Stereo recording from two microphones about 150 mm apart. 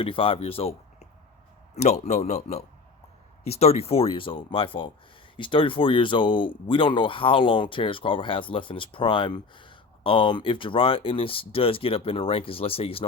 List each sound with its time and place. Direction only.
0.0 s speech: 35° left (ahead or behind)